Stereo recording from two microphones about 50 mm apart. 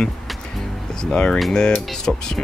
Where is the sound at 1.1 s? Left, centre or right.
Centre.